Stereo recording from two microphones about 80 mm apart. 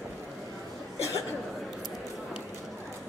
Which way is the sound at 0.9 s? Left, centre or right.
Left.